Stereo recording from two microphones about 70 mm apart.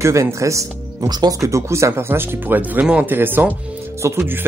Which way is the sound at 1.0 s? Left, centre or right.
Right.